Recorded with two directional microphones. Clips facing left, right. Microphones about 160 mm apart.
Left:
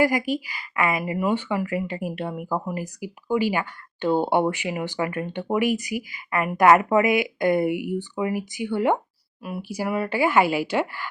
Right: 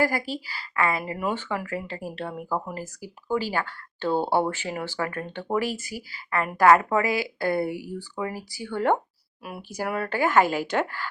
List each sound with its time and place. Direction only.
0.0 s a woman's voice: 15° left (ahead or behind)